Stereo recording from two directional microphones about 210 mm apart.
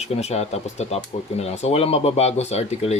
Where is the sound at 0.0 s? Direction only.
30° left (ahead or behind).